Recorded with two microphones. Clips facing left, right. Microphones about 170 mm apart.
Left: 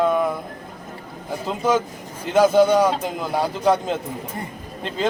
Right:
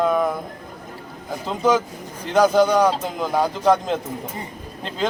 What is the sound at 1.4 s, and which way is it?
Speech, 5° left (ahead or behind).